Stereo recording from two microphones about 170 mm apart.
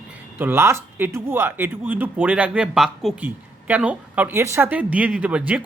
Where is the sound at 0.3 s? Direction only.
15° right (ahead or behind).